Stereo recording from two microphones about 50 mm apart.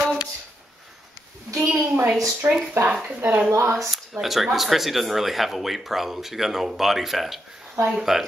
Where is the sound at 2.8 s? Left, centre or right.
Right.